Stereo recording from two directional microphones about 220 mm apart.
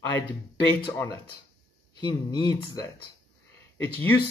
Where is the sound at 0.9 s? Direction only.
15° left (ahead or behind).